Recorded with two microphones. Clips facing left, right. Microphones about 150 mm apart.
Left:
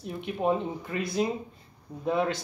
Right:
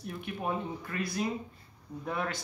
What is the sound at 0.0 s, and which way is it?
Speech, 25° left (ahead or behind).